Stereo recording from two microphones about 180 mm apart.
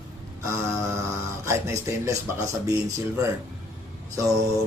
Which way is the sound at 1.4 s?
15° right (ahead or behind).